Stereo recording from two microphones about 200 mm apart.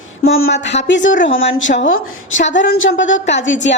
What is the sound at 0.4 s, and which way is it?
A woman's voice, 60° left (ahead or behind).